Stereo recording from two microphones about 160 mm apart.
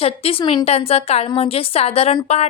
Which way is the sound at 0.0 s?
35° left (ahead or behind).